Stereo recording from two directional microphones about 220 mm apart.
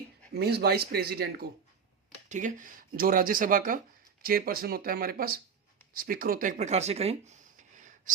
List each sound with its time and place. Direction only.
0.3 s speech: 45° right (ahead or behind)